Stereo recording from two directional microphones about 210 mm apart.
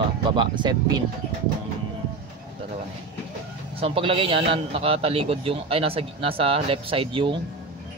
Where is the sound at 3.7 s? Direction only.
25° right (ahead or behind).